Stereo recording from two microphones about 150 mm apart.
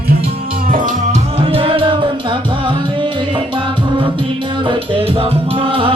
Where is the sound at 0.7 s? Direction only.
60° right (ahead or behind).